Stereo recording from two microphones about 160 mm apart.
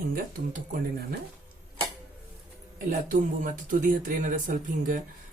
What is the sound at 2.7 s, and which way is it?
Speech, 55° right (ahead or behind).